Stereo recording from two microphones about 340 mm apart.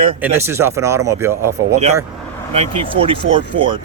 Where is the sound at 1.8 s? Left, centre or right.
Centre.